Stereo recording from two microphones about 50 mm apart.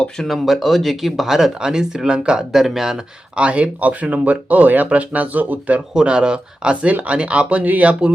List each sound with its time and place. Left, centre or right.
0.3 s speech: centre
2.5 s speech: centre
3.3 s speech: right
5.9 s speech: centre